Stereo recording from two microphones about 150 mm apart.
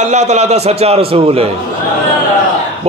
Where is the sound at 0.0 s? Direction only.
50° right (ahead or behind).